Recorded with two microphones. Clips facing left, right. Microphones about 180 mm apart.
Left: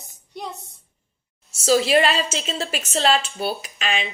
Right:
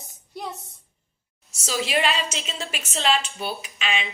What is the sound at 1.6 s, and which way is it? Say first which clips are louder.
Speech: left 7 dB; 40° left (ahead or behind).